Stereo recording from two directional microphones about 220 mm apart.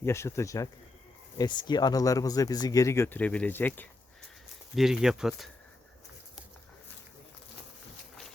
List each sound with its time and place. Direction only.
0.0 s speech: 10° left (ahead or behind)